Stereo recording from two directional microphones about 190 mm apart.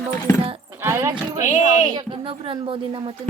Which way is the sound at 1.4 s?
40° left (ahead or behind).